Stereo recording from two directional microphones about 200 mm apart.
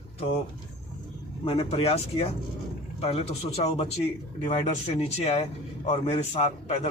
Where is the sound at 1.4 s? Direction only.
25° left (ahead or behind).